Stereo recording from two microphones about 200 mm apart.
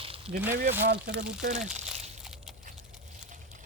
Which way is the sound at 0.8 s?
45° right (ahead or behind).